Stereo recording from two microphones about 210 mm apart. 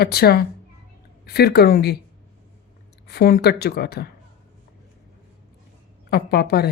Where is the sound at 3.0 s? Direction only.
50° left (ahead or behind).